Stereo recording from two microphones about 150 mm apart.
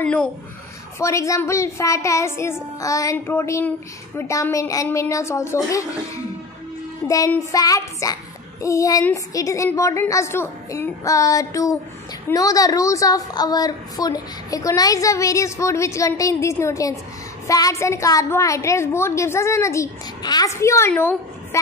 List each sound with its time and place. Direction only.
0.0 s a woman's voice: 5° left (ahead or behind)
0.9 s a woman's voice: 20° left (ahead or behind)